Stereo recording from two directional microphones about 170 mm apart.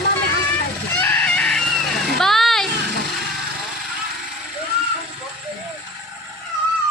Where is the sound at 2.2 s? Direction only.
Centre (ahead or behind).